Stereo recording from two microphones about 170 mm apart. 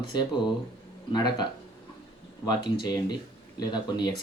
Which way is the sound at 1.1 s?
25° left (ahead or behind).